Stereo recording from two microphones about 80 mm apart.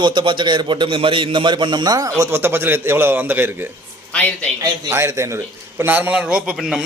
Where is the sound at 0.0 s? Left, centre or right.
Right.